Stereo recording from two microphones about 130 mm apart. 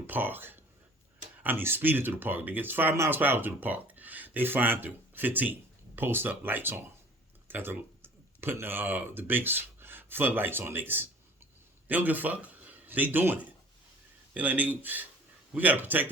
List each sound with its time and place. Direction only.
0.1 s speech: 15° right (ahead or behind)